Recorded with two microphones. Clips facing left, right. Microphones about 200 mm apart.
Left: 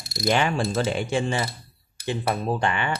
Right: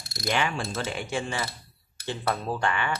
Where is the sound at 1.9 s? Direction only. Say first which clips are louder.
Left 3 dB; 15° left (ahead or behind).